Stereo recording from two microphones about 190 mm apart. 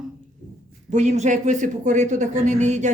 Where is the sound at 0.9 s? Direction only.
40° right (ahead or behind).